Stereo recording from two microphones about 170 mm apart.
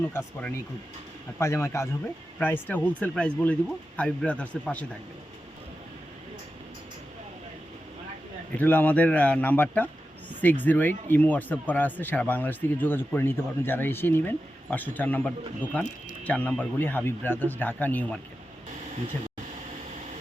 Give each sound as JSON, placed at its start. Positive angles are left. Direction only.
{"t": 0.1, "sound": "speech", "side_deg": 10}
{"t": 8.5, "sound": "speech", "side_deg": 10}